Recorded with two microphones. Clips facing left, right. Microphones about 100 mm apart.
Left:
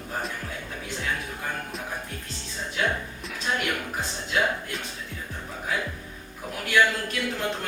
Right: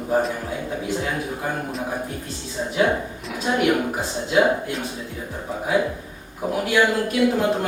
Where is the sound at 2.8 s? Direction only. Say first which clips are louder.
Right 7 dB; 20° right (ahead or behind).